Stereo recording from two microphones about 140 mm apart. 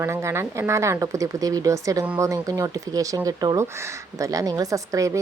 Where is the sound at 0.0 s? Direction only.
20° right (ahead or behind).